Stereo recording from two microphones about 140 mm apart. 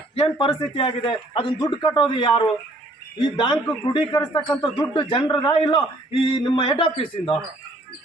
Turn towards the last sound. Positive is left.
turn(degrees=40)  # may be behind; listen again after turning